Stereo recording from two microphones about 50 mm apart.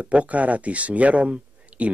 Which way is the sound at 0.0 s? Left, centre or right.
Right.